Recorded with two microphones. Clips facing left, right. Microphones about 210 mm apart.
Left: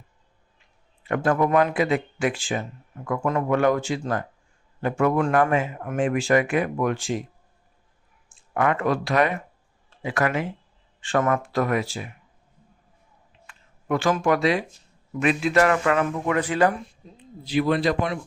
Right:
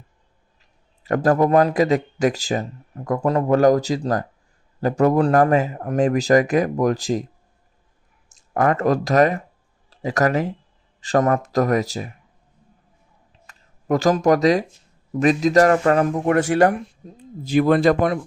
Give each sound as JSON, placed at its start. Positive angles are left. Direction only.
{"t": 0.6, "sound": "speech", "side_deg": -40}
{"t": 8.3, "sound": "speech", "side_deg": -40}
{"t": 13.5, "sound": "a man's voice", "side_deg": -40}